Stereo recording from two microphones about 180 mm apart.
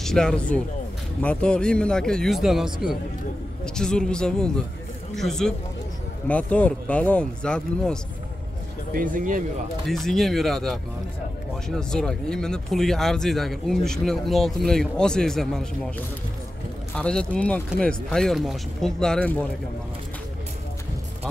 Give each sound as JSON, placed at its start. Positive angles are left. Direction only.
{"t": 0.0, "sound": "speech", "side_deg": 5}
{"t": 8.9, "sound": "speech", "side_deg": -50}
{"t": 9.8, "sound": "speech", "side_deg": 0}
{"t": 16.9, "sound": "speech", "side_deg": 5}